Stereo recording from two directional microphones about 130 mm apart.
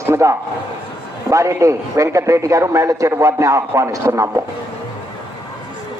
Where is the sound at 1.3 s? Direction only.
25° right (ahead or behind).